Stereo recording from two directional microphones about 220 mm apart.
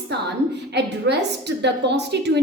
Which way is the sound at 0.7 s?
50° right (ahead or behind).